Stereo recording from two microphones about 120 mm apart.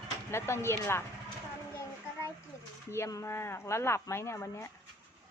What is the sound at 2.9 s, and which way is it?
Speech, 25° left (ahead or behind).